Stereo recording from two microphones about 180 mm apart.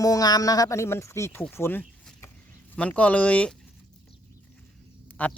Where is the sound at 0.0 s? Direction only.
20° left (ahead or behind).